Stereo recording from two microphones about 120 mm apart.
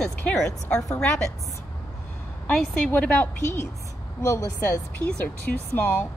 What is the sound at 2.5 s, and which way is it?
Speech, 10° left (ahead or behind).